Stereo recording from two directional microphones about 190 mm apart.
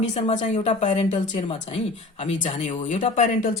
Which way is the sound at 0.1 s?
30° left (ahead or behind).